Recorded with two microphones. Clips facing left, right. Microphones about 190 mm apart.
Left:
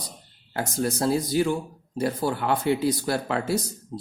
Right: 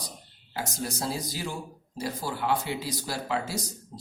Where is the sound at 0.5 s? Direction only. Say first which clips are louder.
Left 7 dB; 55° left (ahead or behind).